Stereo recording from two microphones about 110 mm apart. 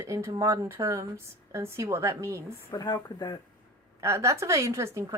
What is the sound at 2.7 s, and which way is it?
Speech, 40° left (ahead or behind).